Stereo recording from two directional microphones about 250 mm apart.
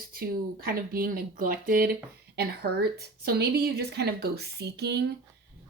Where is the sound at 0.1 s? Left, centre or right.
Right.